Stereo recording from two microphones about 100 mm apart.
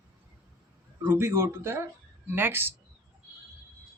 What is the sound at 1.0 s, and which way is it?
Speech, 25° right (ahead or behind).